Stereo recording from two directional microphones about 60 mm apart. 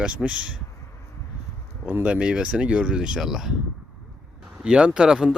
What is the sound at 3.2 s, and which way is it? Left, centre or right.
Speech, centre.